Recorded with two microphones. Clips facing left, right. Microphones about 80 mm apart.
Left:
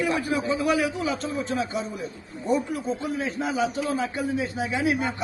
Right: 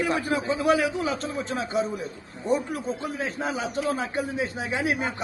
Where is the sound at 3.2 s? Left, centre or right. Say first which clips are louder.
Left 3 dB; right.